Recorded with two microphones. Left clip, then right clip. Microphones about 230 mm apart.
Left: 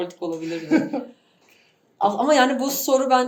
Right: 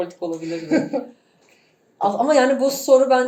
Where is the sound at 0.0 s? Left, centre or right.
Left.